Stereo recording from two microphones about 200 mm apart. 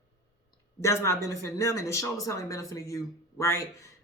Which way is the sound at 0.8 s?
15° left (ahead or behind).